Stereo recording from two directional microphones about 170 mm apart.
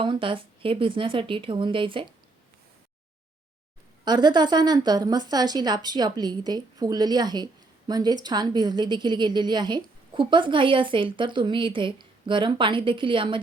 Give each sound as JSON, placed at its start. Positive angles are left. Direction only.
{"t": 0.0, "sound": "a woman's voice", "side_deg": -30}
{"t": 4.0, "sound": "a woman's voice", "side_deg": -25}